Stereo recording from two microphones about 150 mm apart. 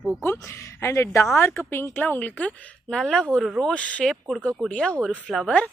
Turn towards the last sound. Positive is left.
turn(degrees=5)  # may be behind; listen again after turning